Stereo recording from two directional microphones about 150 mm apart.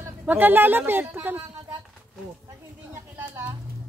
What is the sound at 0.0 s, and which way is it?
Speech, 10° right (ahead or behind).